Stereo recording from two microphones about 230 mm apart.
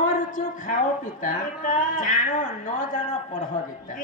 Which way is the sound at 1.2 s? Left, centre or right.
Left.